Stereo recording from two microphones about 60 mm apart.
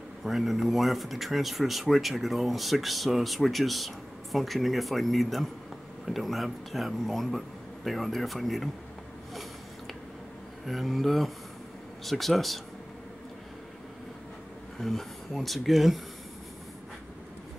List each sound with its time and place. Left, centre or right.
0.2 s speech: centre
10.6 s speech: centre
14.8 s speech: centre